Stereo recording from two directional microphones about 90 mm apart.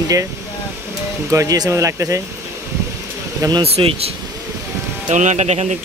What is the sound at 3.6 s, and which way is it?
Speech, 90° right.